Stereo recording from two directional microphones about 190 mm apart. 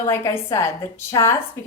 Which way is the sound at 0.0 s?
15° left (ahead or behind).